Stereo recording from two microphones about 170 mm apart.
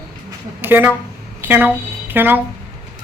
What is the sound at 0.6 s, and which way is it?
A woman's voice, 10° right (ahead or behind).